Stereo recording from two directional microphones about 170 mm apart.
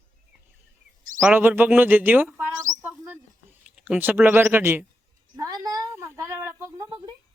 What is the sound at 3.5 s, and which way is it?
Speech, 5° right (ahead or behind).